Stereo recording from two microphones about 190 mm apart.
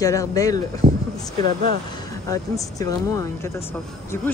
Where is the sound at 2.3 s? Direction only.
15° left (ahead or behind).